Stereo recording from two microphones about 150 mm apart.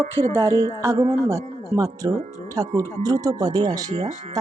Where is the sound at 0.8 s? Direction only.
20° right (ahead or behind).